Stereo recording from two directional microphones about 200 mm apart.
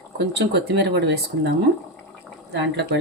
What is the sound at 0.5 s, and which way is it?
Speech, 55° right (ahead or behind).